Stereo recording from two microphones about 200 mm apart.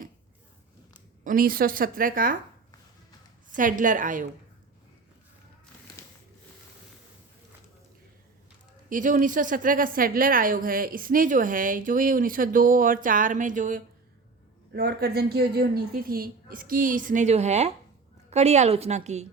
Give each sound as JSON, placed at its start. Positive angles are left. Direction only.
{"t": 1.2, "sound": "a woman's voice", "side_deg": -40}
{"t": 3.5, "sound": "a woman's voice", "side_deg": -40}
{"t": 8.9, "sound": "a woman's voice", "side_deg": -40}
{"t": 14.7, "sound": "a woman's voice", "side_deg": -50}